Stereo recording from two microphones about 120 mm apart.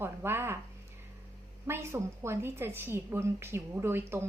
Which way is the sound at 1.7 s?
20° right (ahead or behind).